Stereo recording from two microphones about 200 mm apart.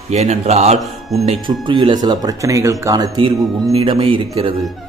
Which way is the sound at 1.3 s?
25° right (ahead or behind).